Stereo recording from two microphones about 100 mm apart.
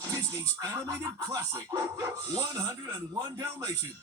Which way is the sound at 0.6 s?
40° right (ahead or behind).